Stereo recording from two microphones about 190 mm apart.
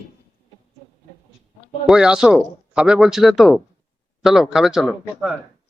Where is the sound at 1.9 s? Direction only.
5° right (ahead or behind).